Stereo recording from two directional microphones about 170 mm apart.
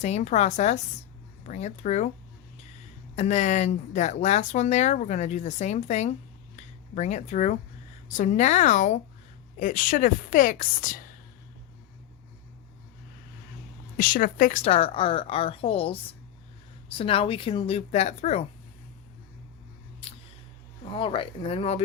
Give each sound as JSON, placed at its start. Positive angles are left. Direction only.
{"t": 0.0, "sound": "a woman's voice", "side_deg": 40}
{"t": 3.2, "sound": "speech", "side_deg": 45}
{"t": 6.6, "sound": "a sound", "side_deg": 40}
{"t": 8.0, "sound": "speech", "side_deg": 45}
{"t": 13.9, "sound": "a woman's voice", "side_deg": 55}
{"t": 17.0, "sound": "a woman's voice", "side_deg": 35}
{"t": 20.9, "sound": "a woman's voice", "side_deg": 30}